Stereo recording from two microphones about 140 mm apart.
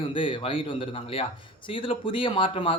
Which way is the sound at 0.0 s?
35° left (ahead or behind).